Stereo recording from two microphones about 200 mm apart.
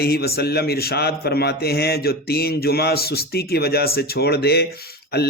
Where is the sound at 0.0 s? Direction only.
50° left (ahead or behind).